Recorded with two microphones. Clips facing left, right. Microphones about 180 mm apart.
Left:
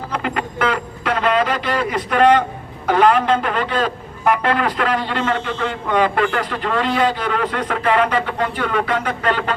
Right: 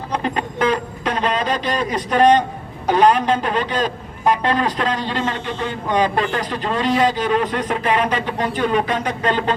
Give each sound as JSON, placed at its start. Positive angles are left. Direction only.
{"t": 0.1, "sound": "a man's voice", "side_deg": -20}